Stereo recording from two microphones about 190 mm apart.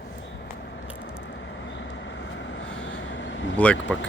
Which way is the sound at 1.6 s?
75° left (ahead or behind).